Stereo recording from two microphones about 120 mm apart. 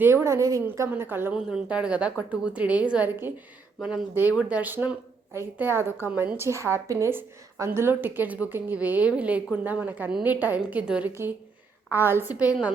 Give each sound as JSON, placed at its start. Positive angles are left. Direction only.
{"t": 0.0, "sound": "a woman's voice", "side_deg": -20}
{"t": 0.9, "sound": "a woman's voice", "side_deg": -15}